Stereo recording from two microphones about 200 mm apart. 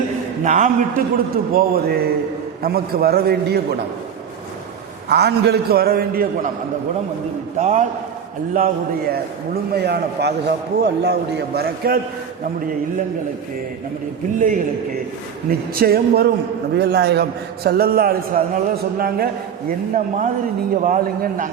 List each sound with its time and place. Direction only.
0.4 s a man's voice: 40° right (ahead or behind)
5.0 s a man's voice: 55° right (ahead or behind)
7.6 s a man's voice: 35° right (ahead or behind)
8.5 s a man's voice: 50° right (ahead or behind)
14.3 s a man's voice: 40° right (ahead or behind)
15.7 s a man's voice: 50° right (ahead or behind)